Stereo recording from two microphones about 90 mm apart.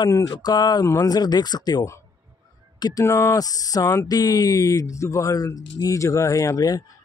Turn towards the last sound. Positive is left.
turn(degrees=40)  # may be behind; listen again after turning